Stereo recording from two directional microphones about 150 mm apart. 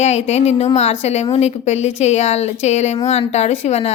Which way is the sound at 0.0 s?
45° left (ahead or behind).